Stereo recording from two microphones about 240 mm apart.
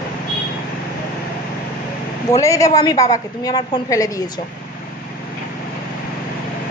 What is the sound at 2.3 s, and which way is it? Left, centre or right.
A woman's voice, centre.